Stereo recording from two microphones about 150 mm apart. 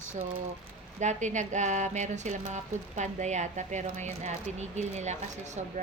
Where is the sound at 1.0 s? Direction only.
55° right (ahead or behind).